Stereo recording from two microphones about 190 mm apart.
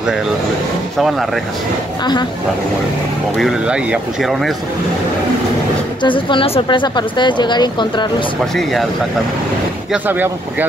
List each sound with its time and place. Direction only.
0.9 s speech: centre (ahead or behind)
3.3 s speech: centre (ahead or behind)
6.0 s a woman's voice: 25° left (ahead or behind)
10.0 s speech: 10° right (ahead or behind)